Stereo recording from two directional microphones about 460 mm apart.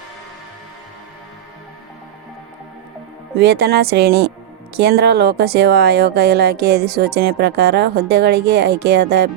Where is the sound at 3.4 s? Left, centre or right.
Right.